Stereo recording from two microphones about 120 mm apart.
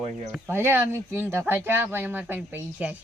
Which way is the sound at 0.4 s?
20° right (ahead or behind).